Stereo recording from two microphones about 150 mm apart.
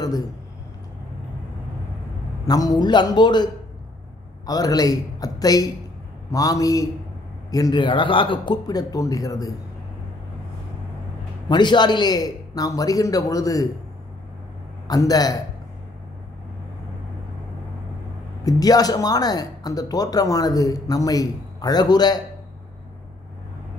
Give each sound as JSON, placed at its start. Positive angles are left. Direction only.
{"t": 0.0, "sound": "speech", "side_deg": 25}
{"t": 2.4, "sound": "speech", "side_deg": 25}
{"t": 4.5, "sound": "speech", "side_deg": 25}
{"t": 11.4, "sound": "speech", "side_deg": 30}
{"t": 14.9, "sound": "speech", "side_deg": 25}
{"t": 18.4, "sound": "speech", "side_deg": 25}